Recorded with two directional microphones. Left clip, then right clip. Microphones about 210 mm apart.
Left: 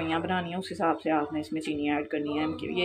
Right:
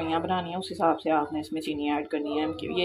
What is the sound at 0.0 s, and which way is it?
Speech, centre (ahead or behind).